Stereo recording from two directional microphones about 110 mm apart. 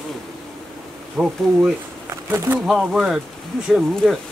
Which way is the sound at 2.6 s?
5° right (ahead or behind).